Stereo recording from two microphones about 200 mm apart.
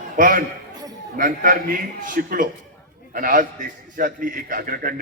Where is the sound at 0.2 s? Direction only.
45° right (ahead or behind).